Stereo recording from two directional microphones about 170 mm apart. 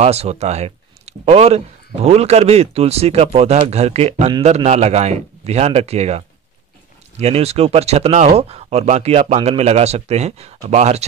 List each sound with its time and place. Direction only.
0.0 s speech: 40° right (ahead or behind)